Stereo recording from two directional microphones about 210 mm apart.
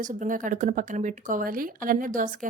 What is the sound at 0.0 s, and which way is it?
Speech, 40° right (ahead or behind).